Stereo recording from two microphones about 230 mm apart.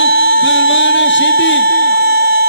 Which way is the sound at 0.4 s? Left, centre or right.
Left.